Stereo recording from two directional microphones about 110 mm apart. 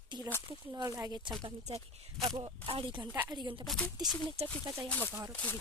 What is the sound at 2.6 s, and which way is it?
Speech, 55° right (ahead or behind).